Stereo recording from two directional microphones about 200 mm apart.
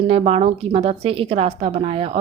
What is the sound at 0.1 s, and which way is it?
Speech, 30° right (ahead or behind).